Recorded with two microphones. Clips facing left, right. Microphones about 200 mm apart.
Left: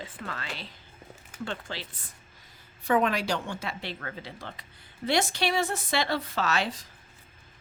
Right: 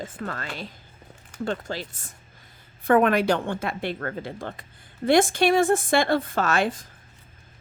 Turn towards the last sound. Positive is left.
turn(degrees=-50)  # may be behind; listen again after turning